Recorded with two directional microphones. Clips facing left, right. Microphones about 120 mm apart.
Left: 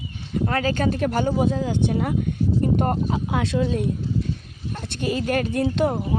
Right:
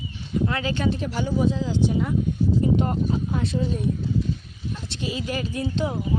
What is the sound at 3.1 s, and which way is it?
Speech, 90° left.